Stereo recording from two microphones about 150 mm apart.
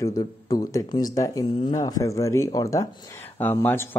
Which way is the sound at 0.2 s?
25° left (ahead or behind).